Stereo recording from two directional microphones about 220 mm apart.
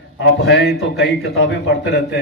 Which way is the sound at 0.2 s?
50° left (ahead or behind).